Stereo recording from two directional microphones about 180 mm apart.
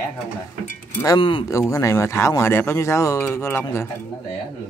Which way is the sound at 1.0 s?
25° left (ahead or behind).